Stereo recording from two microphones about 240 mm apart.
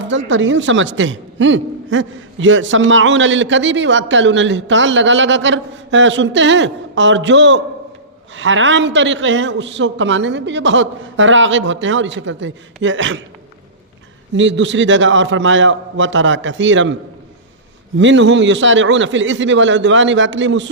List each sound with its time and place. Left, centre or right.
0.0 s a man's voice: right
14.3 s a man's voice: right